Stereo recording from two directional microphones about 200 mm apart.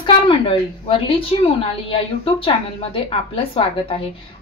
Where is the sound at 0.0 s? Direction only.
25° left (ahead or behind).